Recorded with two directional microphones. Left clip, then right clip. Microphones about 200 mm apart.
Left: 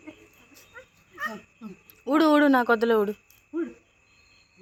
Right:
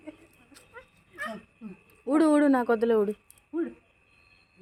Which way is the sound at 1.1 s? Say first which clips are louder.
Left 3 dB; 30° right (ahead or behind).